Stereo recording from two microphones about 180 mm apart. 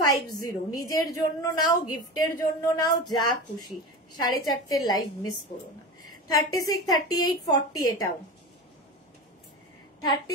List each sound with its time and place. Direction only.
0.1 s a woman's voice: 20° left (ahead or behind)
6.3 s a woman's voice: 20° left (ahead or behind)
10.0 s a woman's voice: 20° left (ahead or behind)